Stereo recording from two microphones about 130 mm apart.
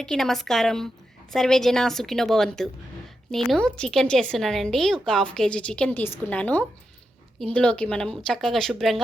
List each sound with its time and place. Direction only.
0.0 s a woman's voice: 5° left (ahead or behind)